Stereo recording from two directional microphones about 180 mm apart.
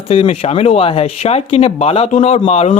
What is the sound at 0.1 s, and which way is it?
Speech, 35° left (ahead or behind).